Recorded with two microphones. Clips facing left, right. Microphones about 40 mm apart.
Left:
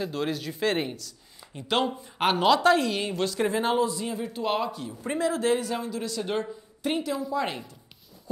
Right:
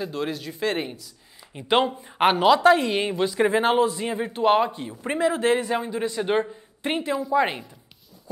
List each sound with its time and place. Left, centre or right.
0.0 s speech: centre
1.5 s a woman's voice: right
2.3 s a woman's voice: centre
2.9 s a woman's voice: right
3.5 s a man's voice: right